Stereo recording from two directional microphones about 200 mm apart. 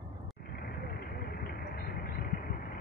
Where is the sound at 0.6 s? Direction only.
50° left (ahead or behind).